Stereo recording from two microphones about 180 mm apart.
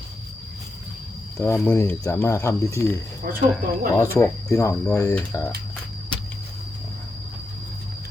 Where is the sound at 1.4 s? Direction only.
15° left (ahead or behind).